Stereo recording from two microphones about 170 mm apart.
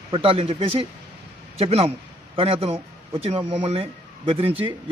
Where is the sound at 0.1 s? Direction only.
35° right (ahead or behind).